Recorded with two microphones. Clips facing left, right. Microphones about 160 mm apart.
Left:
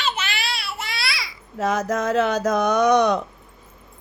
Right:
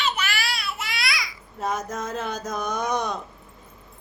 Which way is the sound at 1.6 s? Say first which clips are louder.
Left 6 dB; 90° left.